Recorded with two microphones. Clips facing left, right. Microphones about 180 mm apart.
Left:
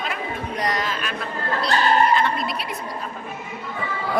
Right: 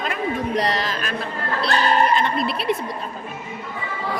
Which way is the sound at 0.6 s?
30° right (ahead or behind).